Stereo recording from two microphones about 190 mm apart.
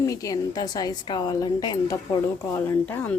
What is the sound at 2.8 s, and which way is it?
Speech, 10° left (ahead or behind).